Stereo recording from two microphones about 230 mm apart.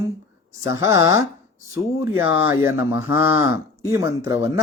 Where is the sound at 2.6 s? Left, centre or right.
Centre.